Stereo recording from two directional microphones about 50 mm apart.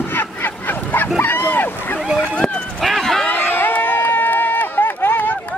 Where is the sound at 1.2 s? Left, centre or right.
Left.